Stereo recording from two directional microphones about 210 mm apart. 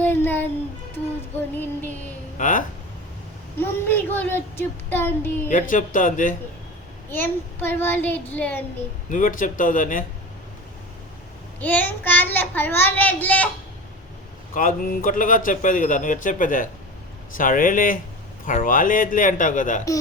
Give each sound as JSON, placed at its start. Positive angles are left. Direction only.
{"t": 0.0, "sound": "music", "side_deg": 10}
{"t": 1.5, "sound": "a child's voice", "side_deg": 10}
{"t": 2.4, "sound": "a man's voice", "side_deg": 40}
{"t": 3.6, "sound": "a child's voice", "side_deg": 10}
{"t": 5.5, "sound": "a man's voice", "side_deg": 35}
{"t": 7.1, "sound": "a child's voice", "side_deg": 10}
{"t": 9.0, "sound": "a man's voice", "side_deg": 40}
{"t": 11.6, "sound": "a child's voice", "side_deg": 10}
{"t": 14.5, "sound": "a man's voice", "side_deg": 40}